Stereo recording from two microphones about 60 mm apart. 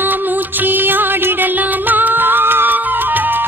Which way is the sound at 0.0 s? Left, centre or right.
Right.